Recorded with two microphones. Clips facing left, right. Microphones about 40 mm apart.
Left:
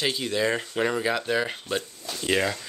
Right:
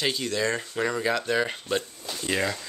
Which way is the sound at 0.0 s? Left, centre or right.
Centre.